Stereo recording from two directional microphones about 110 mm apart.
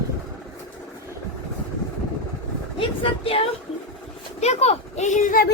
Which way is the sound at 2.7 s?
55° left (ahead or behind).